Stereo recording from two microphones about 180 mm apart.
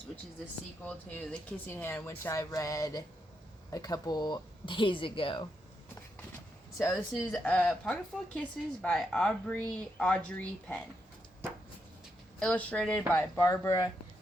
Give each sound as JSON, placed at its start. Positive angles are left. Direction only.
{"t": 0.9, "sound": "speech", "side_deg": 5}
{"t": 7.1, "sound": "a woman's voice", "side_deg": 5}
{"t": 12.4, "sound": "speech", "side_deg": 5}